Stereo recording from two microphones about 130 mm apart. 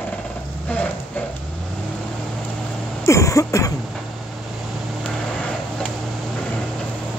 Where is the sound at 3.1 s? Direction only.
25° left (ahead or behind).